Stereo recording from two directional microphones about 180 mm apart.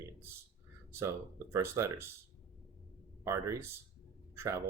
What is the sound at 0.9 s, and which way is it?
Speech, 15° right (ahead or behind).